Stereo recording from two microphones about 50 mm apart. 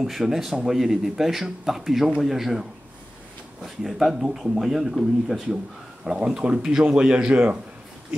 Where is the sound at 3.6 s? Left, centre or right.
Centre.